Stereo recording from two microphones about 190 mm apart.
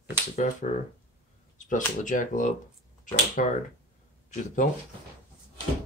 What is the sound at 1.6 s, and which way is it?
Speech, 40° left (ahead or behind).